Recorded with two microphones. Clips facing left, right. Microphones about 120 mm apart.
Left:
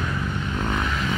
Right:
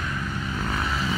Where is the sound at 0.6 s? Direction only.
5° right (ahead or behind).